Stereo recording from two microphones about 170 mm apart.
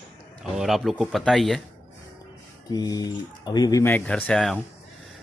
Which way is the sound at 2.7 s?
20° left (ahead or behind).